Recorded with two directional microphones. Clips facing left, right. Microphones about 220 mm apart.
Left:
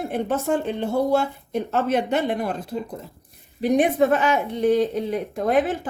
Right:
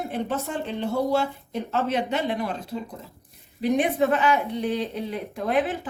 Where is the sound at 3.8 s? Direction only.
50° left (ahead or behind).